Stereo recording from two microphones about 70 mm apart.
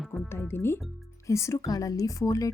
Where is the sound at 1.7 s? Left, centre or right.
Left.